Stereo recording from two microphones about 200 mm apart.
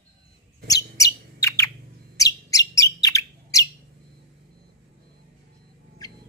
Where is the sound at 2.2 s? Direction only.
15° left (ahead or behind).